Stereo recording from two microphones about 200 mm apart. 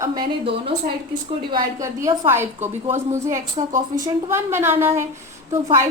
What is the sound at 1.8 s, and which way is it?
A woman's voice, 15° right (ahead or behind).